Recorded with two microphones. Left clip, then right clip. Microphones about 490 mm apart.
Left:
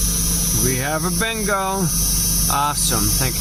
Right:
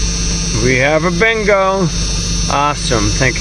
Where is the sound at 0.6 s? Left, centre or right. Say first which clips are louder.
Right 13 dB; left.